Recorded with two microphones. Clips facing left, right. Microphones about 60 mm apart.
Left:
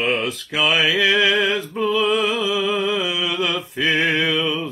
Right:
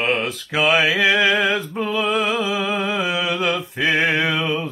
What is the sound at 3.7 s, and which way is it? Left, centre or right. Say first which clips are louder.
Mantra: left 1 dB; right.